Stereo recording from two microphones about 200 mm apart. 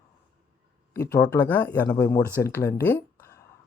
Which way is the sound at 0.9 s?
15° left (ahead or behind).